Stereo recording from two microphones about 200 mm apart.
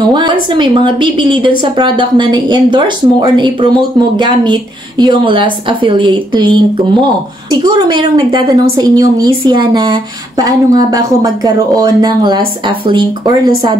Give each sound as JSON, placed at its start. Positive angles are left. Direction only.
{"t": 0.1, "sound": "a woman's voice", "side_deg": -20}